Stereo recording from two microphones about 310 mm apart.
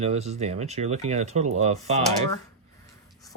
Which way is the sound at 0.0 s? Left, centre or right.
Right.